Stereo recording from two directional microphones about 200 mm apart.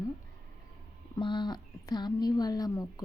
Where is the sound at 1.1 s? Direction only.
25° left (ahead or behind).